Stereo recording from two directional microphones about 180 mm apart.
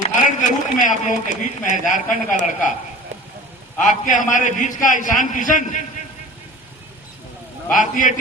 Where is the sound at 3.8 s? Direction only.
45° left (ahead or behind).